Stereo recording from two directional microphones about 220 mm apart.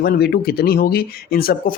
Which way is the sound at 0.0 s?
45° left (ahead or behind).